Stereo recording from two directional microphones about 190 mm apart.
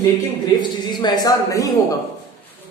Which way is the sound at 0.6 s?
20° left (ahead or behind).